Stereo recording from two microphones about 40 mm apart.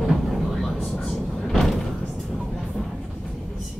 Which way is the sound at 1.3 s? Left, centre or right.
Centre.